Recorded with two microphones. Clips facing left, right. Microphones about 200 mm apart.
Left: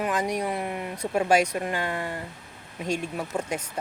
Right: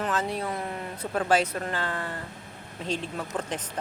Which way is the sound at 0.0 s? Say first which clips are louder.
Left 2 dB; 15° left (ahead or behind).